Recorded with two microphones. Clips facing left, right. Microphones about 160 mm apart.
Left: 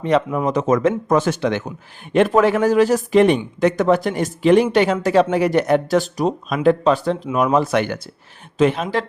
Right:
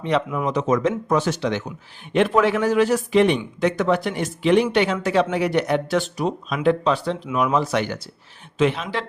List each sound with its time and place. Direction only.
0.0 s speech: 40° left (ahead or behind)
8.5 s speech: 45° left (ahead or behind)